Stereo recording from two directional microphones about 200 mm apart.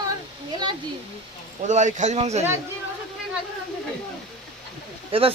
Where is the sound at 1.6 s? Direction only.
35° right (ahead or behind).